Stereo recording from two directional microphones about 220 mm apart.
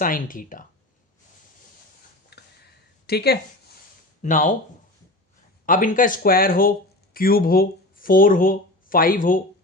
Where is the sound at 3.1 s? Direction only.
45° left (ahead or behind).